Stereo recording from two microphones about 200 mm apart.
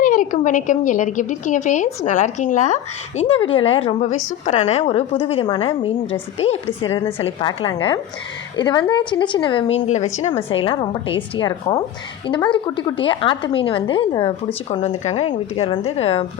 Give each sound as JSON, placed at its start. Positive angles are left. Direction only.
{"t": 0.0, "sound": "a woman's voice", "side_deg": 40}